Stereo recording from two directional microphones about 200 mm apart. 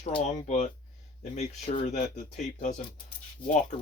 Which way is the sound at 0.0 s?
35° left (ahead or behind).